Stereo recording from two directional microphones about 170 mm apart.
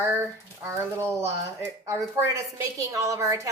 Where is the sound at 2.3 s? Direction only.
20° right (ahead or behind).